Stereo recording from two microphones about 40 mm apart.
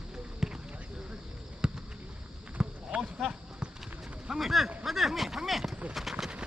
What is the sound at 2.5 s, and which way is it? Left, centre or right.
Clip-clop, right.